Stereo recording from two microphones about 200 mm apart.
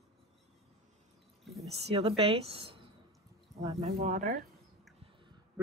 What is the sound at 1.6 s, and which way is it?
Speech, 30° right (ahead or behind).